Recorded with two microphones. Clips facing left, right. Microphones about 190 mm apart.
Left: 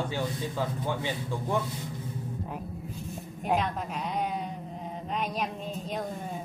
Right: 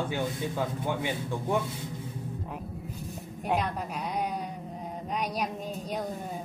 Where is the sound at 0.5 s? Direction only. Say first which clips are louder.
Right 1 dB; 15° right (ahead or behind).